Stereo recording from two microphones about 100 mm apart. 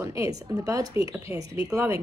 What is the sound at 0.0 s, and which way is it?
Speech, 35° right (ahead or behind).